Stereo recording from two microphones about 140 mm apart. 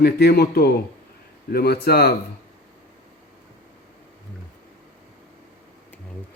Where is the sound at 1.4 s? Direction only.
90° left.